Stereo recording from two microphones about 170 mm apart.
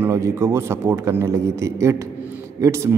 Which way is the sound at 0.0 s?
15° right (ahead or behind).